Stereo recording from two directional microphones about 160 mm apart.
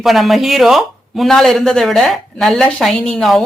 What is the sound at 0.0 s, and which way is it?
Speech, centre (ahead or behind).